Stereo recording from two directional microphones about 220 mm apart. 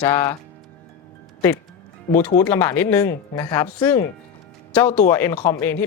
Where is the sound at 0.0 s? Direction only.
10° left (ahead or behind).